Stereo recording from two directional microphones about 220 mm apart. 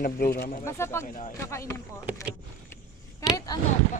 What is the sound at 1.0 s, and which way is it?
Speech, 35° left (ahead or behind).